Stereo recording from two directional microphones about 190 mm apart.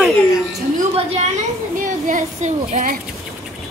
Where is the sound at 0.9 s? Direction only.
35° right (ahead or behind).